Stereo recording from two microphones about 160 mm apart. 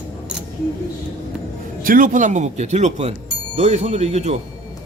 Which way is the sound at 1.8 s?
60° right (ahead or behind).